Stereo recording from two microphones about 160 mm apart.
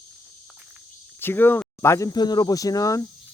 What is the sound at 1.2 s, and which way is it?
Speech, 15° left (ahead or behind).